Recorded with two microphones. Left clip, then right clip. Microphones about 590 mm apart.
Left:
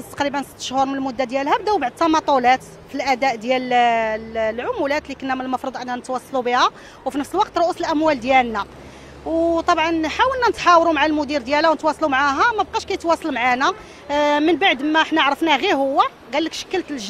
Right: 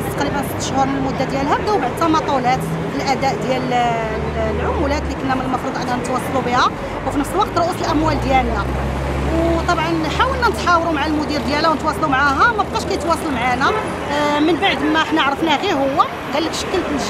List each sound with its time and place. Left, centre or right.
0.7 s speech: left
6.4 s speech: left
9.7 s speech: left